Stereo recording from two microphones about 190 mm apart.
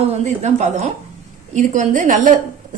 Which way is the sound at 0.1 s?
35° right (ahead or behind).